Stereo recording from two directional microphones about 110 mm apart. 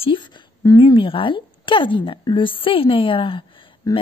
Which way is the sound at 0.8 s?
50° left (ahead or behind).